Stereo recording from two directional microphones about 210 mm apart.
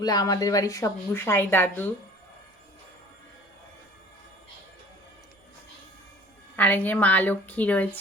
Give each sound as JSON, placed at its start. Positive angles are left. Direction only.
{"t": 0.0, "sound": "a woman's voice", "side_deg": 15}
{"t": 6.6, "sound": "a woman's voice", "side_deg": 10}